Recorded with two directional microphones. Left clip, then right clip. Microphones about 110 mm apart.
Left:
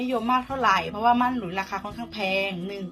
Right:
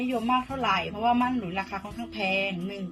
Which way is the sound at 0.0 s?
30° right (ahead or behind).